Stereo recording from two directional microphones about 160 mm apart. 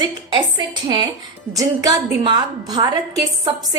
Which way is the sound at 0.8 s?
25° right (ahead or behind).